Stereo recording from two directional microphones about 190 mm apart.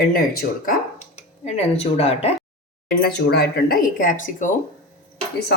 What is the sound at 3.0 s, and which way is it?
Speech, 60° left (ahead or behind).